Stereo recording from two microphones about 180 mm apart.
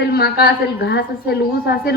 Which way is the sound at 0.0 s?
60° left (ahead or behind).